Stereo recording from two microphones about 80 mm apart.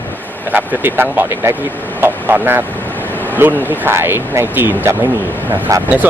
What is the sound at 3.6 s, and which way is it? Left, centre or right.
Speech, right.